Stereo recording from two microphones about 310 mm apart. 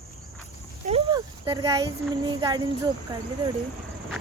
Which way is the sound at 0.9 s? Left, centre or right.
Centre.